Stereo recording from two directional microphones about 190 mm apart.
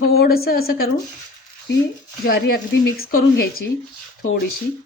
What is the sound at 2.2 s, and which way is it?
A woman's voice, 55° left (ahead or behind).